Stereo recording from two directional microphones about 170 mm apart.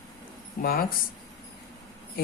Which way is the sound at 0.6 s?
60° left (ahead or behind).